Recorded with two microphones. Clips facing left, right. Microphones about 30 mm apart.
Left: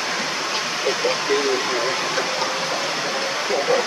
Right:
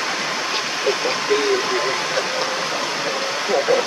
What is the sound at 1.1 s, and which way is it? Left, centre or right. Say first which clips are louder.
Speech: right 1 dB; centre.